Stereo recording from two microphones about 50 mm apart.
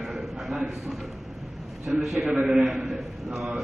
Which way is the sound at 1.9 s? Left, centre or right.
Centre.